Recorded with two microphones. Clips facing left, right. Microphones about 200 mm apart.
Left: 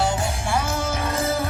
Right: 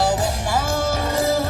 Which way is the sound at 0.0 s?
40° right (ahead or behind).